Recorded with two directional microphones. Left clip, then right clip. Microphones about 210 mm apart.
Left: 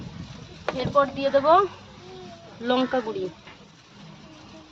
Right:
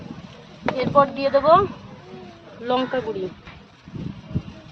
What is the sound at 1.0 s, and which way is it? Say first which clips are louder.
Speech: right 3 dB; 5° left (ahead or behind).